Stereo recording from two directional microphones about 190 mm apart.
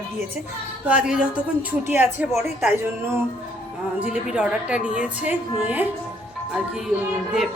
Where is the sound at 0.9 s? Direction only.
5° right (ahead or behind).